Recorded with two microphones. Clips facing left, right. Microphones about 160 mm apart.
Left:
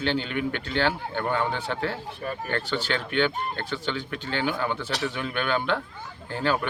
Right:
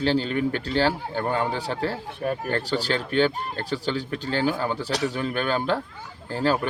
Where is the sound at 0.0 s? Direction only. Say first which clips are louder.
Right 4 dB; 35° right (ahead or behind).